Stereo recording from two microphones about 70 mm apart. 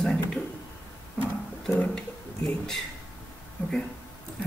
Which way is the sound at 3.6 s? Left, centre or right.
Left.